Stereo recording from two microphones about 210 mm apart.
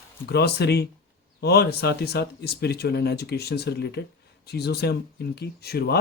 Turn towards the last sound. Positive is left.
turn(degrees=50)  # may be behind; listen again after turning